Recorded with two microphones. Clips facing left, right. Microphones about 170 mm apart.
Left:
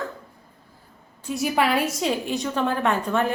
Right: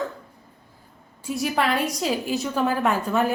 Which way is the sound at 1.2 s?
Centre (ahead or behind).